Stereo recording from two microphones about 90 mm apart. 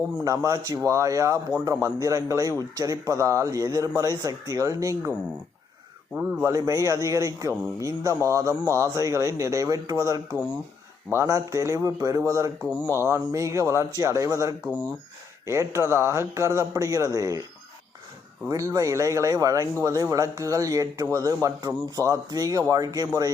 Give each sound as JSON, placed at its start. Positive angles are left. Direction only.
{"t": 0.3, "sound": "a man's voice", "side_deg": -40}
{"t": 6.4, "sound": "a man's voice", "side_deg": -40}
{"t": 18.4, "sound": "a man's voice", "side_deg": -40}